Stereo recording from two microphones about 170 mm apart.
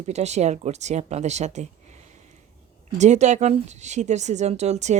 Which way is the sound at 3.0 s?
45° right (ahead or behind).